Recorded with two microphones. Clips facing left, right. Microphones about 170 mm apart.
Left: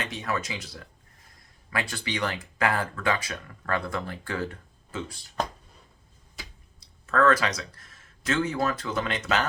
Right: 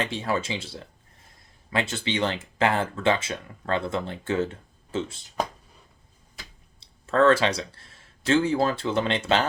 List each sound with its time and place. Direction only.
0.0 s speech: 30° right (ahead or behind)
6.7 s speech: 25° right (ahead or behind)